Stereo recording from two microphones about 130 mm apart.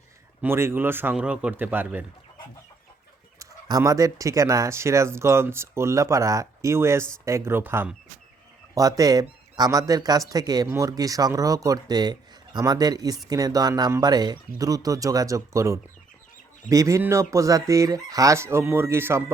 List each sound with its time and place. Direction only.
0.4 s speech: 20° right (ahead or behind)
3.3 s speech: 25° right (ahead or behind)
8.7 s speech: 25° right (ahead or behind)